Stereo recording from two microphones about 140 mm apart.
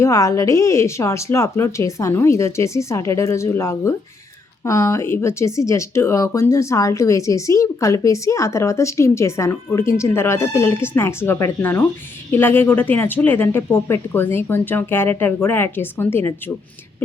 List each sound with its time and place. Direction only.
0.0 s speech: 20° left (ahead or behind)